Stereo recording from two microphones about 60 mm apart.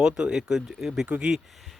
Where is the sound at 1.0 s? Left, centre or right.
Right.